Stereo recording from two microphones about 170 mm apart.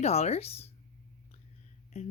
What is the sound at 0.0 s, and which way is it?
Speech, 40° left (ahead or behind).